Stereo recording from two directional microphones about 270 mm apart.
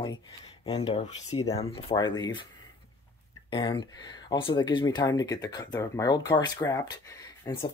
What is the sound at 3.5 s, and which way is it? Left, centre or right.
Speech, centre.